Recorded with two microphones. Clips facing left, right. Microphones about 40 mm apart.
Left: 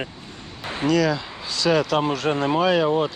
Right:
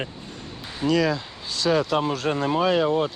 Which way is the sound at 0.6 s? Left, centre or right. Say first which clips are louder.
Left 4 dB; left.